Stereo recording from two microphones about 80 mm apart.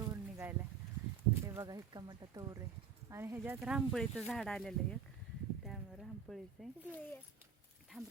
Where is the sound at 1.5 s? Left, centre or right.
Right.